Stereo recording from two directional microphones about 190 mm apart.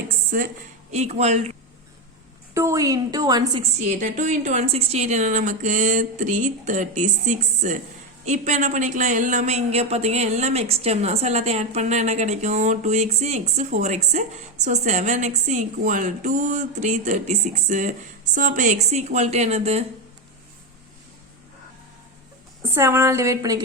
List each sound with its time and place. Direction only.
0.9 s speech: 35° right (ahead or behind)
2.6 s a woman's voice: 15° right (ahead or behind)
3.8 s speech: 40° right (ahead or behind)
22.7 s a woman's voice: 15° right (ahead or behind)